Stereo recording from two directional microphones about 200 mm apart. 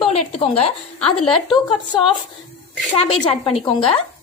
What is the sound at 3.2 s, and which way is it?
Speech, 30° left (ahead or behind).